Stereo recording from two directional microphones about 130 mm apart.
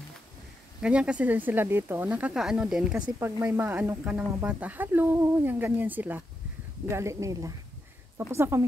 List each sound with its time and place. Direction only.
0.8 s speech: 10° right (ahead or behind)
3.2 s speech: 15° right (ahead or behind)